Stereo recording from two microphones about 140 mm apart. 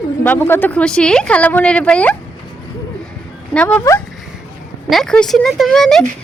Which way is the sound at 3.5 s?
10° left (ahead or behind).